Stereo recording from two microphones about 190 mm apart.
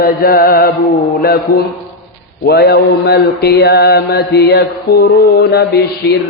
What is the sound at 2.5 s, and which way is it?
Mantra, 55° left (ahead or behind).